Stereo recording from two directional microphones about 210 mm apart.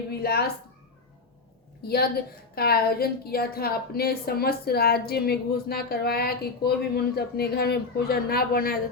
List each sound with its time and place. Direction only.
0.1 s speech: 50° left (ahead or behind)
2.6 s a woman's voice: 45° left (ahead or behind)